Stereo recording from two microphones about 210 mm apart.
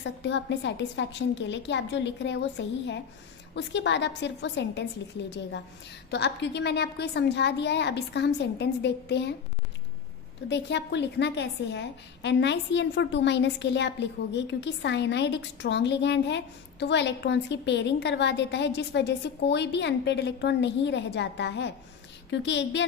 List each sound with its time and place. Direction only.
0.0 s a woman's voice: 55° left (ahead or behind)
10.5 s a woman's voice: 55° left (ahead or behind)